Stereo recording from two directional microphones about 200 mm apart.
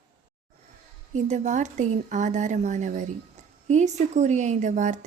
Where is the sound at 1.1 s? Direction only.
35° right (ahead or behind).